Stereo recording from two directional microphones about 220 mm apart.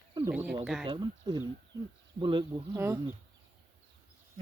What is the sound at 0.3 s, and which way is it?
Speech, 5° right (ahead or behind).